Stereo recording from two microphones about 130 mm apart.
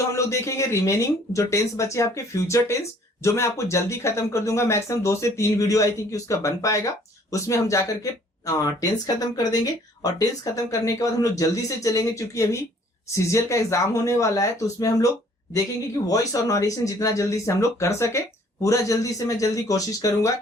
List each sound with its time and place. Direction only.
0.1 s speech: 25° left (ahead or behind)